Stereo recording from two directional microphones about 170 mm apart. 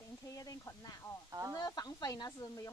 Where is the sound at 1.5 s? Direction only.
20° left (ahead or behind).